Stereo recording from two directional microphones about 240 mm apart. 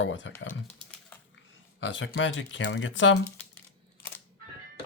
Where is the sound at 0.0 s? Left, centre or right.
Left.